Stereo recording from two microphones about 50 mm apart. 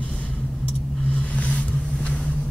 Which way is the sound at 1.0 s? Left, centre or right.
Left.